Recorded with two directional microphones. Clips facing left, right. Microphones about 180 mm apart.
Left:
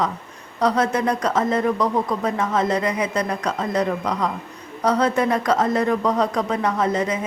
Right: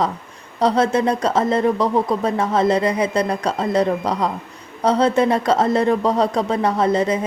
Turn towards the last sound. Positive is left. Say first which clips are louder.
# right 4 dB
turn(degrees=-30)  # may be behind; listen again after turning